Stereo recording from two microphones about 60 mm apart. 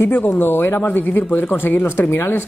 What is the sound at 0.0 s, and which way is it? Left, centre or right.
Speech, left.